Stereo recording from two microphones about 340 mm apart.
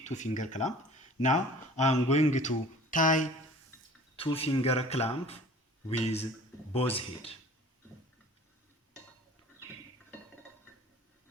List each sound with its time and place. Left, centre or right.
0.0 s speech: left